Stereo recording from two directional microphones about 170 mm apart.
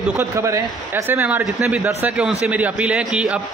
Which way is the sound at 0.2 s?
15° right (ahead or behind).